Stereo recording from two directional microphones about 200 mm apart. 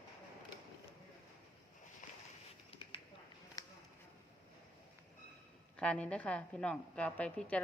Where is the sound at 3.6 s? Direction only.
15° left (ahead or behind).